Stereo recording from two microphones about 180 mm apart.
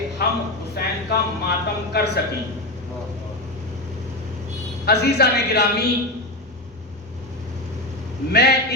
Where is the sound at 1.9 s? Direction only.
65° left (ahead or behind).